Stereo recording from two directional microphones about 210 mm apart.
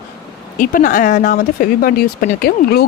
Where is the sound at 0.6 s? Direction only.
40° left (ahead or behind).